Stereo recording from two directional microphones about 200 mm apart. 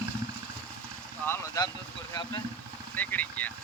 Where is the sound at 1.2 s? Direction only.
15° left (ahead or behind).